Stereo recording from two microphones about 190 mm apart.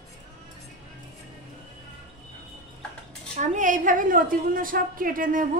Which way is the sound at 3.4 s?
40° right (ahead or behind).